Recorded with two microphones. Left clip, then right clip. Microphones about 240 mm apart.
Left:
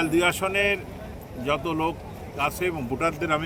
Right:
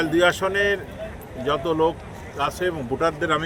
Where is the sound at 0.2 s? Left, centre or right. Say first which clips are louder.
Right 5 dB; centre.